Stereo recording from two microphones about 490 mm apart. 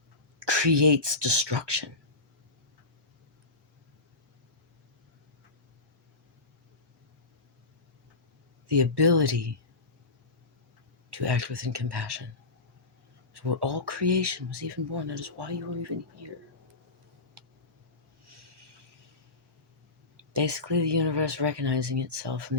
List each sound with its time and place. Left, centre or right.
0.3 s speech: right
8.6 s speech: right
11.1 s speech: right
13.3 s speech: right
20.3 s speech: right